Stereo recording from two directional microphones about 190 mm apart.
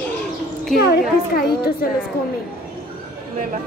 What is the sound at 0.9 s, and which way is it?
A woman's voice, 55° left (ahead or behind).